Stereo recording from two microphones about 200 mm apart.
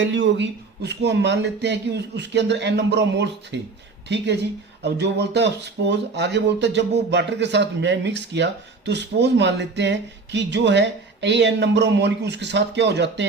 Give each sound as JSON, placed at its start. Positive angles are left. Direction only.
{"t": 0.0, "sound": "speech", "side_deg": -65}